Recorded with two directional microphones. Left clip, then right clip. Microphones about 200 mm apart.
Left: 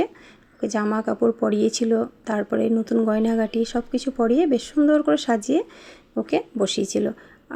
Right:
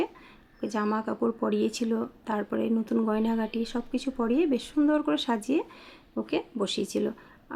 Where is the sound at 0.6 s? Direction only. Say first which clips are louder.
Left 5 dB; 20° left (ahead or behind).